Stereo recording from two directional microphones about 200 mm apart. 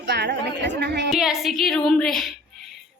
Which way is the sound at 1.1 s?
Centre (ahead or behind).